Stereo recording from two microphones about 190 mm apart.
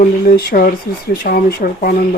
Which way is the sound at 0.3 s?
55° left (ahead or behind).